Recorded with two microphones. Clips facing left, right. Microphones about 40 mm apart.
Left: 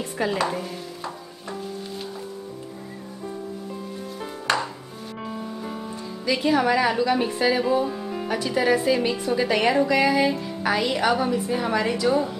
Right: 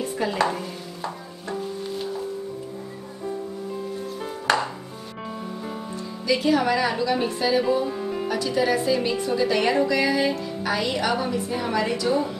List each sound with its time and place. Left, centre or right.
0.4 s music: centre
4.2 s music: centre
6.2 s a woman's voice: centre
7.6 s music: centre
8.3 s a woman's voice: centre